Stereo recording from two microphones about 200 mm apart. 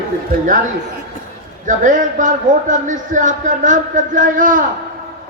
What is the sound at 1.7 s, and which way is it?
A man's voice, 40° right (ahead or behind).